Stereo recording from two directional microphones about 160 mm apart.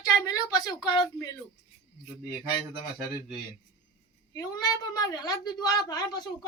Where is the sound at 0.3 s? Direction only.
25° left (ahead or behind).